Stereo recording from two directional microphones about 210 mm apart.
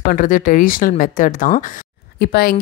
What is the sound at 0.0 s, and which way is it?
Speech, 40° left (ahead or behind).